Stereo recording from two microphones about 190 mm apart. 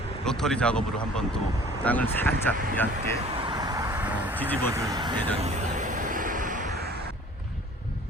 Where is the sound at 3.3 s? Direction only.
25° right (ahead or behind).